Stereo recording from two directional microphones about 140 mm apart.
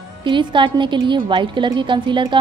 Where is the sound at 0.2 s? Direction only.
35° right (ahead or behind).